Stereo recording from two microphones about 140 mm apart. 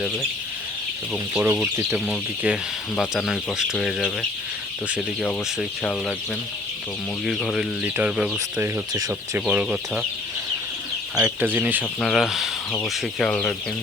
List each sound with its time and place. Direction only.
1.1 s speech: 10° right (ahead or behind)
7.3 s speech: centre (ahead or behind)
8.5 s speech: 20° right (ahead or behind)
9.5 s speech: 5° right (ahead or behind)
11.1 s speech: 10° right (ahead or behind)
11.9 s speech: centre (ahead or behind)